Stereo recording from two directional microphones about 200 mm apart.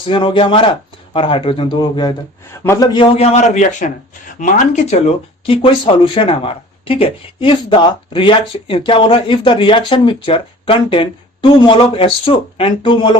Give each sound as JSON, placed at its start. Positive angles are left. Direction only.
{"t": 0.0, "sound": "a man's voice", "side_deg": 25}